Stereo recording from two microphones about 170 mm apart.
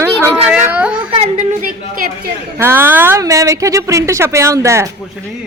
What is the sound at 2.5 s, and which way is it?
A woman's voice, 15° right (ahead or behind).